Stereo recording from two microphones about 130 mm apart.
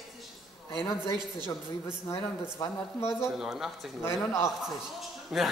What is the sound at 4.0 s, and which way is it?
Speech, 20° left (ahead or behind).